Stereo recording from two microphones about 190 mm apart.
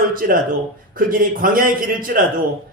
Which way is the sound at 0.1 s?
50° right (ahead or behind).